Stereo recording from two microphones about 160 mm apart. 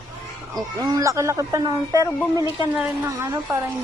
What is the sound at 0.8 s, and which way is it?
Speech, 20° right (ahead or behind).